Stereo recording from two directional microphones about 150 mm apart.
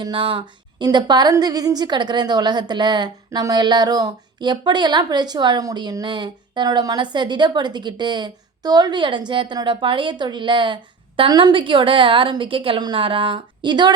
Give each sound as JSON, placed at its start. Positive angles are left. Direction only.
{"t": 0.0, "sound": "a woman's voice", "side_deg": -35}